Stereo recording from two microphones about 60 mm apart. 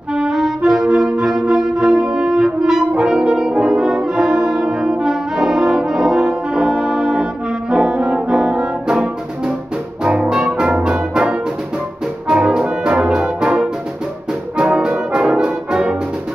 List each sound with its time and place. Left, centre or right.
0.1 s music: centre
7.7 s brass instrument: centre
10.0 s music: right
10.8 s brass instrument: centre
12.3 s music: centre
14.6 s brass instrument: centre